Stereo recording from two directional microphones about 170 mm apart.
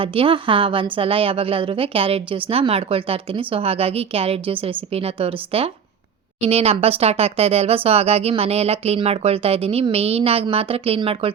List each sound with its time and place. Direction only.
0.0 s speech: 30° right (ahead or behind)